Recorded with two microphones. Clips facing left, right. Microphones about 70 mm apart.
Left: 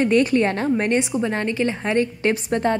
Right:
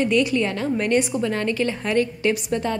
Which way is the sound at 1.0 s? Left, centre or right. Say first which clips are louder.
Even; left.